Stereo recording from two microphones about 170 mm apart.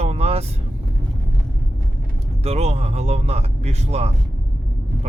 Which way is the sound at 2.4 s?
40° right (ahead or behind).